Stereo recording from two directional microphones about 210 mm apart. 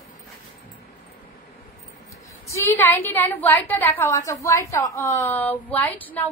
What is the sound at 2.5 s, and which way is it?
A woman's voice, 10° left (ahead or behind).